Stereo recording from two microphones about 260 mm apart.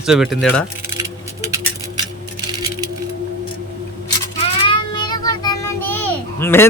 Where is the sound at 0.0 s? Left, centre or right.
Centre.